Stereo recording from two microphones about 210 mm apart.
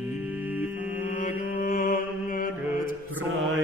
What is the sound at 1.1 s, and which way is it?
Mantra, 35° left (ahead or behind).